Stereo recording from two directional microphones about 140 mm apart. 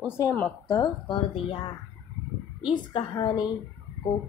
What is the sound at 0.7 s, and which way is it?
A woman's voice, 35° left (ahead or behind).